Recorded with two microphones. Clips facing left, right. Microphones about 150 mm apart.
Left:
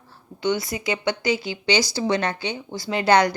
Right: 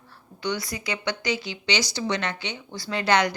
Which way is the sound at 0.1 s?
25° left (ahead or behind).